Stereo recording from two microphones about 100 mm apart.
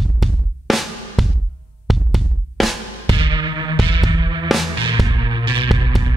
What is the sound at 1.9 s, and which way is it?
Drum, centre (ahead or behind).